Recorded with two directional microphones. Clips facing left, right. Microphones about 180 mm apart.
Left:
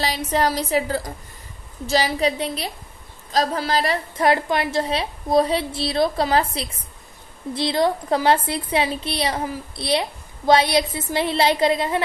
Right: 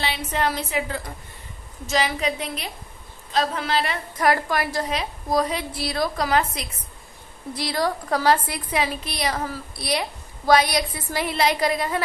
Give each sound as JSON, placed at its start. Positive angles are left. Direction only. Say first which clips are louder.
{"t": 0.0, "sound": "a woman's voice", "louder": "left 4 dB", "side_deg": 40}